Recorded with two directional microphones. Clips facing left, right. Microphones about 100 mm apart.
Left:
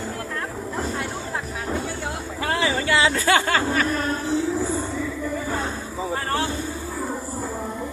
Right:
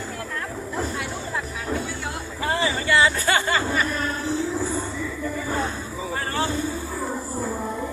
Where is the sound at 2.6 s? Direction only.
85° left.